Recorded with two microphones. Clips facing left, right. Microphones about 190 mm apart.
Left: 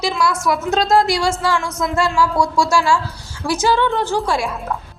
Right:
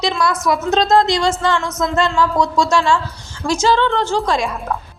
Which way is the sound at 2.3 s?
20° right (ahead or behind).